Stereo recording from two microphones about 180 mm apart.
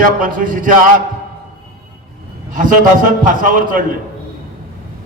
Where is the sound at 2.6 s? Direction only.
50° right (ahead or behind).